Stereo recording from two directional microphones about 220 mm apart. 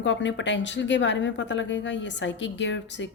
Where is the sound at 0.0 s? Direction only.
55° left (ahead or behind).